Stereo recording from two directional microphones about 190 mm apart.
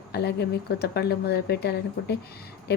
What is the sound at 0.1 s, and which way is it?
Speech, 60° left (ahead or behind).